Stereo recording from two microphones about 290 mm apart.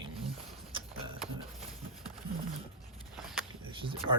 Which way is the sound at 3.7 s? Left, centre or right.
Centre.